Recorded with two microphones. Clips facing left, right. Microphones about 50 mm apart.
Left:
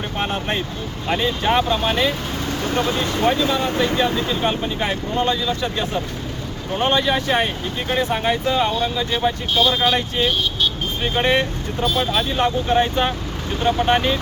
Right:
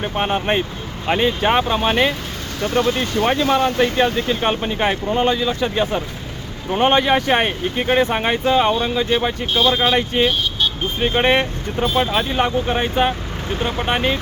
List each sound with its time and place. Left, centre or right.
0.0 s speech: right
3.2 s speech: right; by 14.2 s centre